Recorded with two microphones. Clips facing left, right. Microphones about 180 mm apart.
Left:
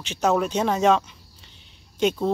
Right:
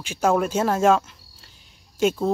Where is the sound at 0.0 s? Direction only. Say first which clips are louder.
Right 1 dB; 10° right (ahead or behind).